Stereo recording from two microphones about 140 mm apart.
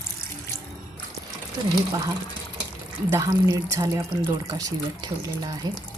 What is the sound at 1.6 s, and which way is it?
Speech, 25° right (ahead or behind).